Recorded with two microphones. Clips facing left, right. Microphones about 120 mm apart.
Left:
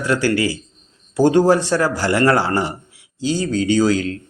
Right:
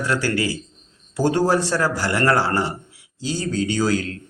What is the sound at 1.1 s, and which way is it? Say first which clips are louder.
A man's voice: left 5 dB; 20° left (ahead or behind).